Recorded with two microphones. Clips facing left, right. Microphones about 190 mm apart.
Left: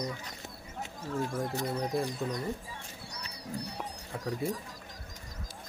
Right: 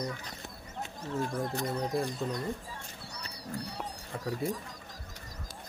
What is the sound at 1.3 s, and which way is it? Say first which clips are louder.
Speech: even; 5° left (ahead or behind).